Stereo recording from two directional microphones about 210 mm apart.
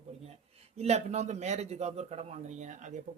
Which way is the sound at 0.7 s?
30° right (ahead or behind).